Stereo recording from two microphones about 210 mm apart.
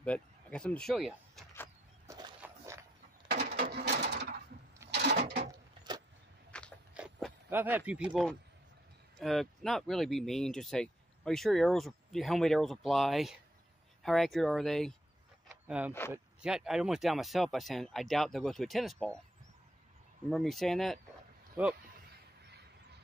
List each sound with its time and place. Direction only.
0.0 s speech: 5° left (ahead or behind)
2.0 s a sound: 20° right (ahead or behind)
2.4 s walk: 15° right (ahead or behind)
3.3 s sewing machine: 45° right (ahead or behind)
4.9 s a sound: 55° right (ahead or behind)
5.4 s a sound: 20° right (ahead or behind)
6.5 s biting: 5° left (ahead or behind)
6.9 s dog: 5° right (ahead or behind)
7.4 s speech: 10° right (ahead or behind)
20.2 s speech: centre (ahead or behind)
21.6 s speech: 10° right (ahead or behind)